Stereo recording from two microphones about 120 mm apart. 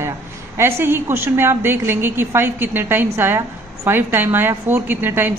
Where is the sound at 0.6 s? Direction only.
20° right (ahead or behind).